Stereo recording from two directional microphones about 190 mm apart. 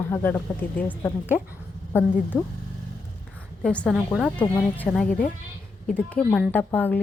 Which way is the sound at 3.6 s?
5° left (ahead or behind).